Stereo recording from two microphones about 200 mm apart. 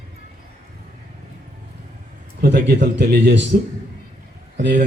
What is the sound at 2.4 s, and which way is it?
A man's voice, 55° right (ahead or behind).